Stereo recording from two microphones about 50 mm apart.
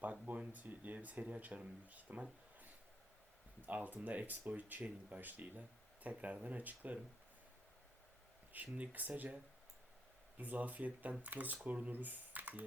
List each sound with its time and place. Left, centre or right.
0.0 s speech: right
3.7 s speech: right
8.5 s speech: right
10.3 s speech: right